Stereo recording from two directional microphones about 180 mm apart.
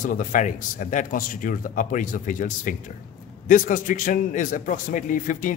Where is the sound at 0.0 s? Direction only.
45° left (ahead or behind).